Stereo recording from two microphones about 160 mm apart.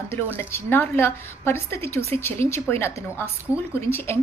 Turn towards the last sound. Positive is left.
turn(degrees=15)  # may be behind; listen again after turning